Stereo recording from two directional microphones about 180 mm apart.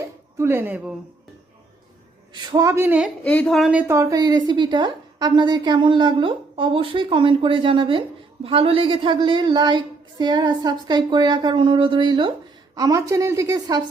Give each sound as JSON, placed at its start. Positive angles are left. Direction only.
{"t": 0.3, "sound": "a woman's voice", "side_deg": -10}
{"t": 2.3, "sound": "a woman's voice", "side_deg": -20}
{"t": 3.2, "sound": "a woman's voice", "side_deg": 5}